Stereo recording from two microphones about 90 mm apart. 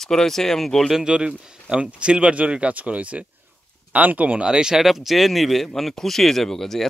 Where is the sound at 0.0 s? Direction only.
5° left (ahead or behind).